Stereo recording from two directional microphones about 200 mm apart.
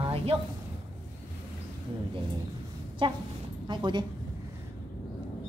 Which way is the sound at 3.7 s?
20° right (ahead or behind).